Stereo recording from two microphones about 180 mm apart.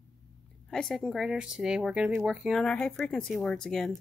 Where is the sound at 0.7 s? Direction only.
Centre (ahead or behind).